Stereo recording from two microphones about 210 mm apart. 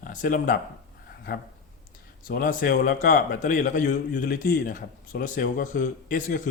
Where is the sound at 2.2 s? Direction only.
40° left (ahead or behind).